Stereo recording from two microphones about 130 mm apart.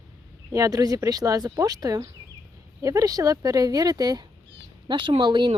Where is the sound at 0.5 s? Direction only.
25° right (ahead or behind).